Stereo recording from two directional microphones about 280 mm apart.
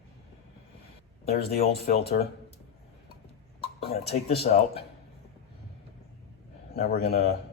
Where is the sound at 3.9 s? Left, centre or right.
Left.